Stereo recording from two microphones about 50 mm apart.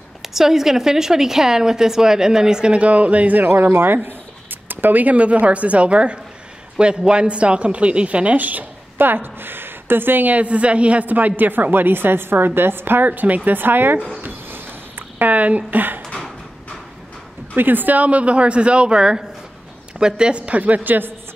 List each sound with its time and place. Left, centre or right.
0.2 s a woman's voice: centre; by 13.9 s right
14.2 s a sound: right
17.6 s a woman's voice: right